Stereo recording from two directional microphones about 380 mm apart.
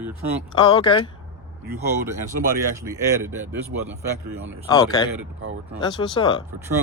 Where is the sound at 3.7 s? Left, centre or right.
Right.